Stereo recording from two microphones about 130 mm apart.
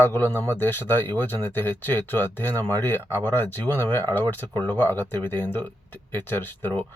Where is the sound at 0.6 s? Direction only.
15° left (ahead or behind).